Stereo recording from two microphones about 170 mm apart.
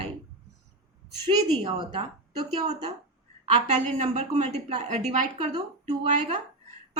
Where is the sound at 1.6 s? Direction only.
35° right (ahead or behind).